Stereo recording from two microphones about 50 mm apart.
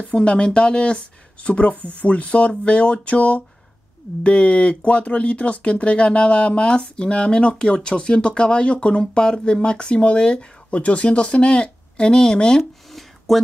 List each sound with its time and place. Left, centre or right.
0.0 s speech: left
13.3 s speech: centre